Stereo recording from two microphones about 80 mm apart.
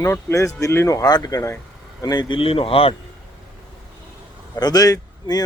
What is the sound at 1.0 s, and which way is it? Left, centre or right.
Speech, left.